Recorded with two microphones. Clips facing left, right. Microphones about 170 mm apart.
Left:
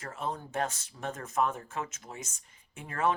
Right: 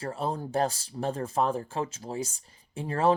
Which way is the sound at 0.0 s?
30° right (ahead or behind).